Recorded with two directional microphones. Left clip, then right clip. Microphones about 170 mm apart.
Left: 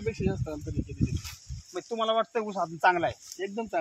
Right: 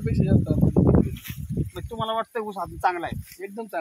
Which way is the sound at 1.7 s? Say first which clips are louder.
Left 1 dB; 35° left (ahead or behind).